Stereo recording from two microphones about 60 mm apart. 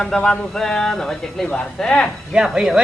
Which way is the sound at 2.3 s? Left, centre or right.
Centre.